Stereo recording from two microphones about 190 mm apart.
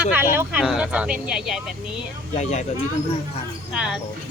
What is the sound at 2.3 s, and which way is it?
Speech, 35° left (ahead or behind).